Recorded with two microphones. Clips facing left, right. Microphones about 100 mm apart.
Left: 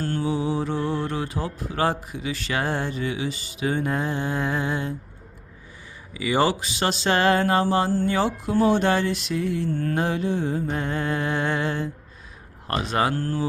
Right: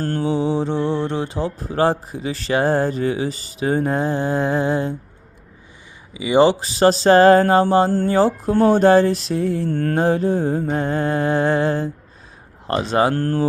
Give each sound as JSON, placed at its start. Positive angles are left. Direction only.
{"t": 0.2, "sound": "speech", "side_deg": -30}
{"t": 6.1, "sound": "speech", "side_deg": -20}
{"t": 6.6, "sound": "speech", "side_deg": -35}
{"t": 9.6, "sound": "mantra", "side_deg": -65}
{"t": 9.9, "sound": "speech", "side_deg": -35}
{"t": 13.1, "sound": "mantra", "side_deg": -55}